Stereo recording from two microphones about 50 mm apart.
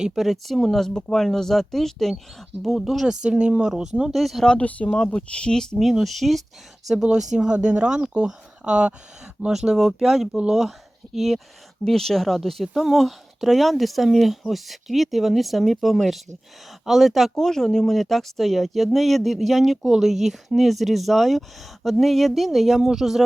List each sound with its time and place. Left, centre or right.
0.1 s speech: centre
3.2 s speech: centre
4.1 s speech: centre
4.6 s speech: left
5.8 s speech: centre
6.8 s speech: centre
9.5 s speech: centre
17.3 s speech: centre